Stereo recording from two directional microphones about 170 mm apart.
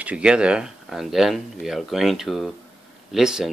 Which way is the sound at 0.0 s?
5° right (ahead or behind).